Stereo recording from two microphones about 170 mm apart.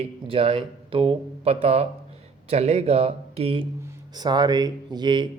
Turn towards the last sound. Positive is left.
turn(degrees=-25)  # may be behind; listen again after turning